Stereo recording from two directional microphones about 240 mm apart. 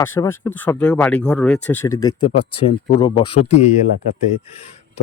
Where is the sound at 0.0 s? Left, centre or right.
Centre.